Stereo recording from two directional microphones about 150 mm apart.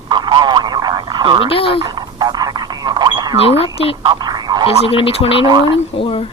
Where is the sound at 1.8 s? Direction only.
30° right (ahead or behind).